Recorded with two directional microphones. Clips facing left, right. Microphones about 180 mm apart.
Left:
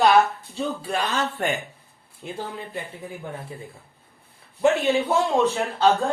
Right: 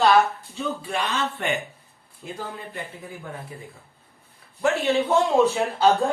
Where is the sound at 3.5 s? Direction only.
25° left (ahead or behind).